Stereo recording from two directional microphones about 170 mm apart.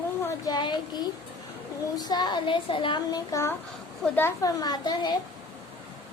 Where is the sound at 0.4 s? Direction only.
25° left (ahead or behind).